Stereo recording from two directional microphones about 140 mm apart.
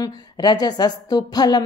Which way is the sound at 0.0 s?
30° left (ahead or behind).